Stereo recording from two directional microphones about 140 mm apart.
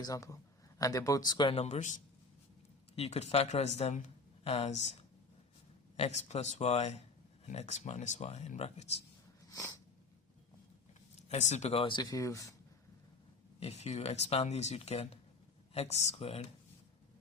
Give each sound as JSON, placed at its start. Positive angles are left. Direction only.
{"t": 0.0, "sound": "speech", "side_deg": 25}
{"t": 1.5, "sound": "speech", "side_deg": 55}
{"t": 6.0, "sound": "speech", "side_deg": 50}
{"t": 9.5, "sound": "snort", "side_deg": 25}
{"t": 11.2, "sound": "speech", "side_deg": 55}
{"t": 13.6, "sound": "speech", "side_deg": 50}